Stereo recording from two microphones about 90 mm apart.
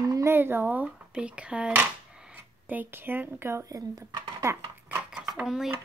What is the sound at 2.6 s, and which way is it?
Speech, 20° right (ahead or behind).